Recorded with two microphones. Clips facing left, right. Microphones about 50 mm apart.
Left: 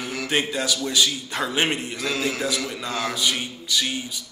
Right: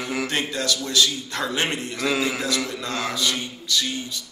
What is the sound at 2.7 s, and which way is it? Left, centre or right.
Speech, centre.